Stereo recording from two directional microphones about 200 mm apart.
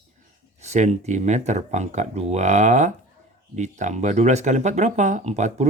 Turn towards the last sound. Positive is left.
turn(degrees=-35)  # may be behind; listen again after turning